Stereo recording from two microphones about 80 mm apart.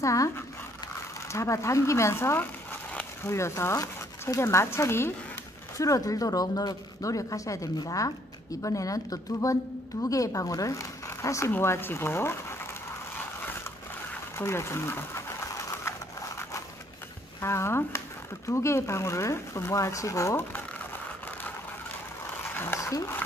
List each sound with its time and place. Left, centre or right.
0.0 s speech: left
1.3 s speech: left
5.8 s speech: left
14.4 s sewing machine: left
17.4 s speech: left
22.8 s a sound: left